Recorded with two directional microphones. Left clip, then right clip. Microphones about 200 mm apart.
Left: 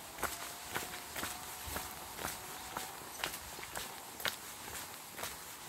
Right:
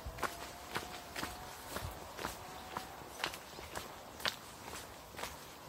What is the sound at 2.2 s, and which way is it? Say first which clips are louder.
Walk: left 1 dB; 50° left (ahead or behind).